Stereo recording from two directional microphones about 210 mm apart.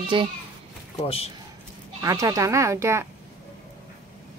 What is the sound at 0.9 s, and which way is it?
Speech, 25° left (ahead or behind).